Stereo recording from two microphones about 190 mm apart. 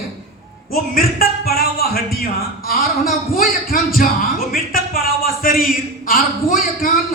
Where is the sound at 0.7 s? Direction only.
50° left (ahead or behind).